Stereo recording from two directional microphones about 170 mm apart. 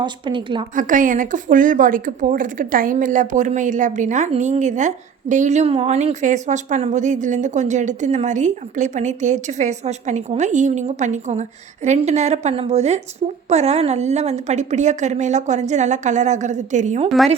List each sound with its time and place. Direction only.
0.0 s a woman's voice: 30° right (ahead or behind)
0.8 s a woman's voice: 50° right (ahead or behind)